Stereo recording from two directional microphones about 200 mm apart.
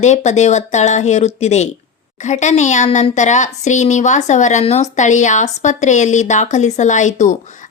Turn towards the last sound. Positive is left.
turn(degrees=35)  # may be behind; listen again after turning